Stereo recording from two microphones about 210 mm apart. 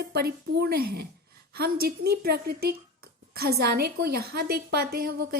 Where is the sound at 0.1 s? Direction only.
50° right (ahead or behind).